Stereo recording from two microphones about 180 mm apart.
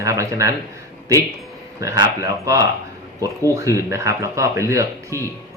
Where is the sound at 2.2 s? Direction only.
15° right (ahead or behind).